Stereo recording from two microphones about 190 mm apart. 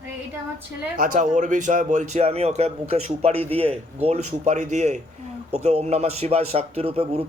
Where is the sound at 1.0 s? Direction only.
40° right (ahead or behind).